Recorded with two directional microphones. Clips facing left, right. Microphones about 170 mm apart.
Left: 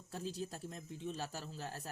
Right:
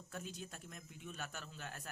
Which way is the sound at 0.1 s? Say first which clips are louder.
Left 6 dB; 35° left (ahead or behind).